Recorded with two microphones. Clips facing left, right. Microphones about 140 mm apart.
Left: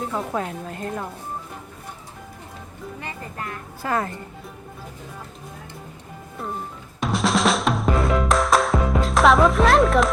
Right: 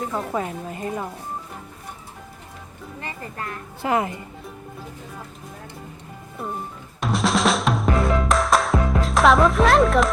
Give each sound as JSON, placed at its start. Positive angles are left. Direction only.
{"t": 0.0, "sound": "speech", "side_deg": 0}
{"t": 3.8, "sound": "speech", "side_deg": -15}
{"t": 7.0, "sound": "music", "side_deg": 0}